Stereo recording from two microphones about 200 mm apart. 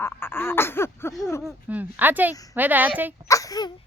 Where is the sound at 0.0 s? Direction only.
10° left (ahead or behind).